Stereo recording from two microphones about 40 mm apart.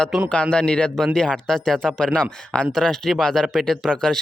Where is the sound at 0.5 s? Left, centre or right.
Left.